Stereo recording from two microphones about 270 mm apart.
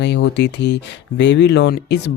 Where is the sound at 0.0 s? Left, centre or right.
Left.